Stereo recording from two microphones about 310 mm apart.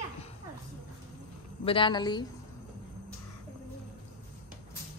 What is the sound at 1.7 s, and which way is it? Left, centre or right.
Speech, centre.